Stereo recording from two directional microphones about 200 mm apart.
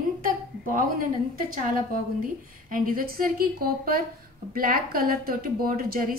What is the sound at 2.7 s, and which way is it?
A woman's voice, 45° right (ahead or behind).